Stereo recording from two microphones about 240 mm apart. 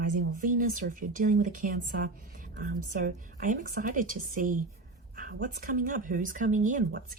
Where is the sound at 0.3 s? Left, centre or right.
Right.